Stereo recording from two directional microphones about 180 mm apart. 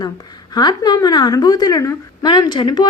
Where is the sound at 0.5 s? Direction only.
20° left (ahead or behind).